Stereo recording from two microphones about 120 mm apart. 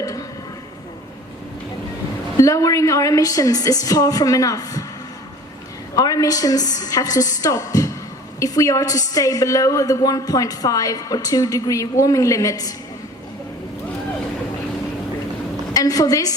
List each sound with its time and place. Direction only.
0.0 s a sound: 30° left (ahead or behind)
2.4 s a woman's voice: 30° left (ahead or behind)
6.0 s a woman's voice: 30° left (ahead or behind)
15.7 s a woman's voice: 30° left (ahead or behind)